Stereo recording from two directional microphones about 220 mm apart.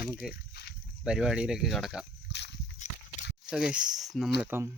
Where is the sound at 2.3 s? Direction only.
50° left (ahead or behind).